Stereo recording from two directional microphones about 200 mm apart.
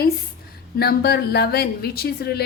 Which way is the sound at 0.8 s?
50° left (ahead or behind).